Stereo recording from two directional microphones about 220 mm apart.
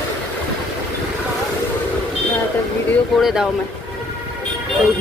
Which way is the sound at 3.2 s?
Centre (ahead or behind).